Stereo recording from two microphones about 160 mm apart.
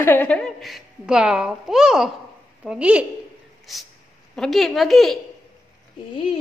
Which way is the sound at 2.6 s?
5° right (ahead or behind).